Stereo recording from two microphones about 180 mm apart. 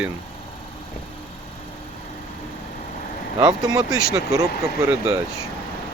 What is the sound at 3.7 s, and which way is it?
Speech, 20° right (ahead or behind).